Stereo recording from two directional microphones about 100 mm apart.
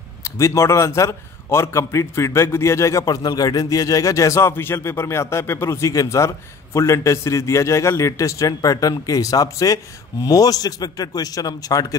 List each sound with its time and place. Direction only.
0.2 s a man's voice: 30° left (ahead or behind)